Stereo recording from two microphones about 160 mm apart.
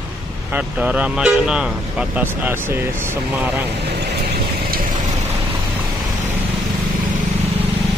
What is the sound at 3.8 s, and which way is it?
Vehicle, 90° right.